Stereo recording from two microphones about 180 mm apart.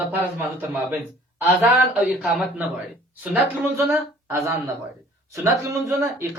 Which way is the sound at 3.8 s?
15° right (ahead or behind).